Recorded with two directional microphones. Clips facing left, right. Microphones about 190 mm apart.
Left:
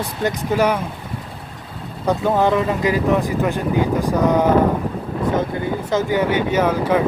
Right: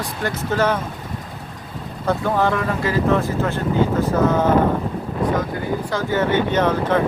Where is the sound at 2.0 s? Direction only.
15° left (ahead or behind).